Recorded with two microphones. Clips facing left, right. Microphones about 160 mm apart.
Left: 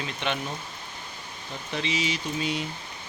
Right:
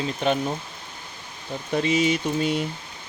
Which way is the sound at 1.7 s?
50° right (ahead or behind).